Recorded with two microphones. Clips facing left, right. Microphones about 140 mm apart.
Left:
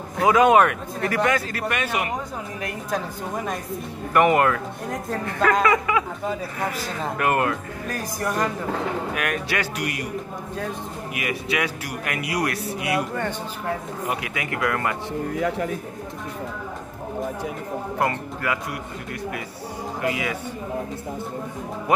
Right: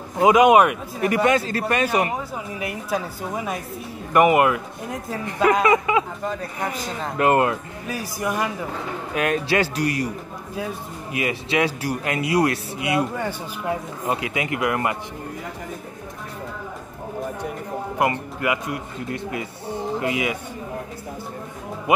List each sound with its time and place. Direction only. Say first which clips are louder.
0.2 s a man's voice: right 2 dB; 15° right (ahead or behind); by 2.0 s 35° right (ahead or behind)
2.6 s a woman's voice: right 1 dB; 5° right (ahead or behind)
4.8 s speech: left 2 dB; 5° right (ahead or behind)
5.2 s a man's voice: right 2 dB; 20° right (ahead or behind)
7.9 s a woman's voice: right 1 dB; 10° right (ahead or behind)
9.1 s a man's voice: right 5 dB; 25° right (ahead or behind)
11.1 s a man's voice: right 4 dB; 30° right (ahead or behind)
13.1 s a woman's voice: even; 10° right (ahead or behind)
14.0 s a man's voice: right 5 dB; 25° right (ahead or behind)
15.3 s a man's voice: left 9 dB; 80° left
18.4 s a man's voice: right 4 dB; 20° right (ahead or behind)